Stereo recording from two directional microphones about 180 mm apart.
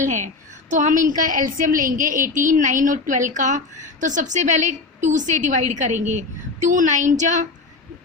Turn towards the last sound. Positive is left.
turn(degrees=-45)  # may be behind; listen again after turning